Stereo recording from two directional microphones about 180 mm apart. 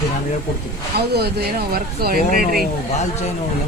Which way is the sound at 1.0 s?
60° right (ahead or behind).